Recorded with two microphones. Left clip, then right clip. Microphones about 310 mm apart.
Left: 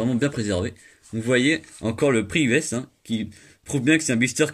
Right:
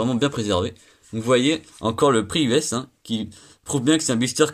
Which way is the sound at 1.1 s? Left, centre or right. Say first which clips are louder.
Right 1 dB; right.